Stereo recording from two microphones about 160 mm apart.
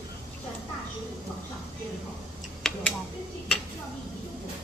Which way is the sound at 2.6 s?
5° left (ahead or behind).